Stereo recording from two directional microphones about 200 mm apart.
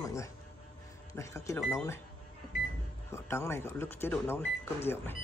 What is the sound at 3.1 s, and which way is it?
Speech, 15° left (ahead or behind).